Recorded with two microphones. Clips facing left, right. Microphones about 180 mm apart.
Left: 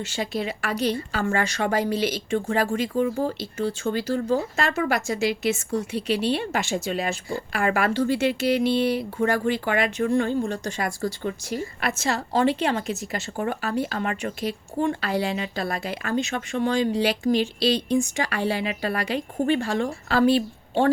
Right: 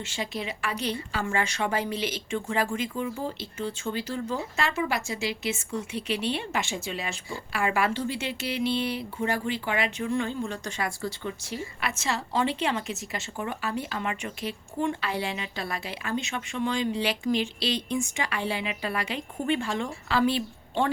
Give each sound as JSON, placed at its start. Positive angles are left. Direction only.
{"t": 0.0, "sound": "speech", "side_deg": 40}